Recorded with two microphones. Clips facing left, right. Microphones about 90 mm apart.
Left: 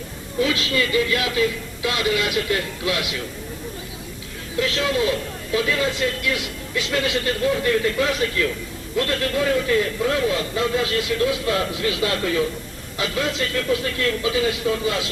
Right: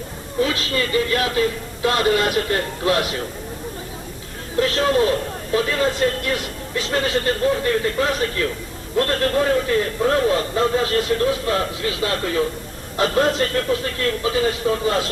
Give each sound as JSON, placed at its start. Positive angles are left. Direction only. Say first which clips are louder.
{"t": 0.3, "sound": "speech", "louder": "even", "side_deg": -40}
{"t": 4.5, "sound": "speech", "louder": "right 4 dB", "side_deg": -40}